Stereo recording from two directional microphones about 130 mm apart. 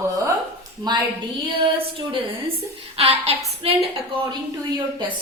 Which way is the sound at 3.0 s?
50° right (ahead or behind).